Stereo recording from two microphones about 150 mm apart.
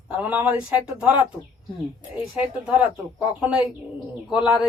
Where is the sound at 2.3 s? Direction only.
10° right (ahead or behind).